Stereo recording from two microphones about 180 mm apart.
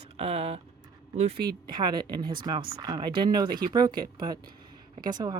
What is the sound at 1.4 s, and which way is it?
Speech, 25° right (ahead or behind).